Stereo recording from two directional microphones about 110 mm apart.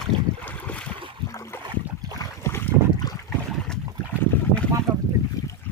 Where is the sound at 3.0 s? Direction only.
35° left (ahead or behind).